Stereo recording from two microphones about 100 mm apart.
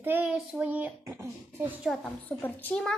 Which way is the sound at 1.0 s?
30° right (ahead or behind).